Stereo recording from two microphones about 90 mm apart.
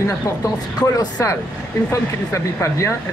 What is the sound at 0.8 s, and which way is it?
Speech, 50° left (ahead or behind).